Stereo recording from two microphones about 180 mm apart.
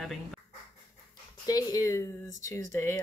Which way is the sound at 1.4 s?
20° left (ahead or behind).